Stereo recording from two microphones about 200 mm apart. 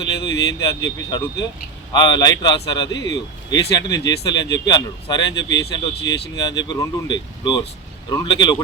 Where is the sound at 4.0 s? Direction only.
20° left (ahead or behind).